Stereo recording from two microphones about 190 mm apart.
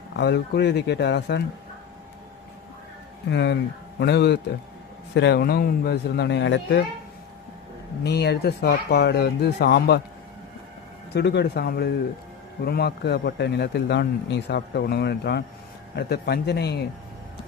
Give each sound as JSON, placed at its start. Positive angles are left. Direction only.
{"t": 0.2, "sound": "a man's voice", "side_deg": 60}
{"t": 3.2, "sound": "a man's voice", "side_deg": 65}
{"t": 8.0, "sound": "a man's voice", "side_deg": 60}
{"t": 11.1, "sound": "a man's voice", "side_deg": 60}